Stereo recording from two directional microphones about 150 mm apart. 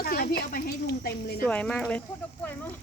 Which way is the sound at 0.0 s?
80° left.